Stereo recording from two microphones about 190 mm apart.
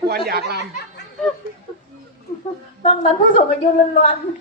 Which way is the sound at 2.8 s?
40° left (ahead or behind).